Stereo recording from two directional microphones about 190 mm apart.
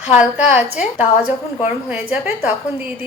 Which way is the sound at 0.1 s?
5° right (ahead or behind).